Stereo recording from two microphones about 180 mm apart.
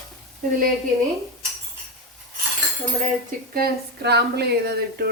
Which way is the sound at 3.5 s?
60° right (ahead or behind).